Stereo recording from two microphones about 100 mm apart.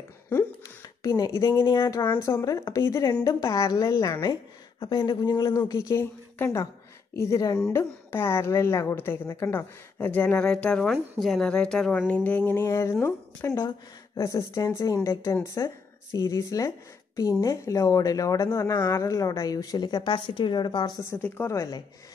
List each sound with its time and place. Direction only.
1.0 s a woman's voice: 40° left (ahead or behind)
4.7 s a woman's voice: 55° left (ahead or behind)
21.0 s a woman's voice: 25° left (ahead or behind)